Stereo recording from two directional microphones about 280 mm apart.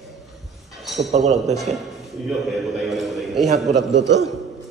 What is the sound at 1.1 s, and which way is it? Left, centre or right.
Speech, right.